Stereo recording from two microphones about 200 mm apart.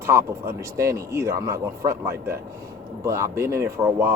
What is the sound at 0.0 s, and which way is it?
A man's voice, 15° right (ahead or behind).